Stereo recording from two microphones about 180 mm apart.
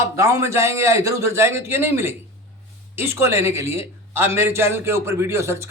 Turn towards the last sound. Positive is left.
turn(degrees=-15)  # may be behind; listen again after turning